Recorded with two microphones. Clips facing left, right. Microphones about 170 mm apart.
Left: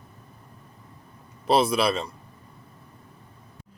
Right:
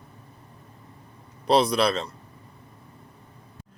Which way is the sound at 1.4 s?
5° left (ahead or behind).